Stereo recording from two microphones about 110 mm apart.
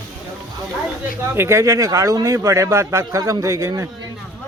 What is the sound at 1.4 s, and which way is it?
A man's voice, 25° right (ahead or behind).